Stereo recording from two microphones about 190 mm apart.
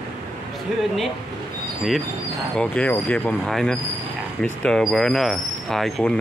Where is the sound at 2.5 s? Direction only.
5° left (ahead or behind).